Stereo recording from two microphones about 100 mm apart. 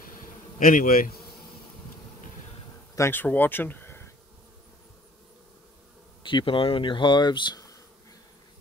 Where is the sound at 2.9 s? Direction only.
25° left (ahead or behind).